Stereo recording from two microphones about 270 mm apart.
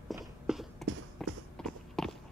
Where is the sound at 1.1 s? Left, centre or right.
Centre.